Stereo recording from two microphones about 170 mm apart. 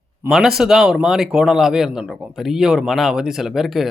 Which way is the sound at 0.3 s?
Centre (ahead or behind).